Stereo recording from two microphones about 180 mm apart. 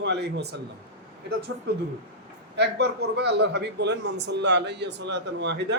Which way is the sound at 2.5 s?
70° right (ahead or behind).